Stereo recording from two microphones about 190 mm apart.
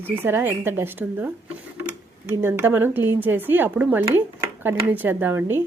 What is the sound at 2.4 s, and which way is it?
Speech, 10° right (ahead or behind).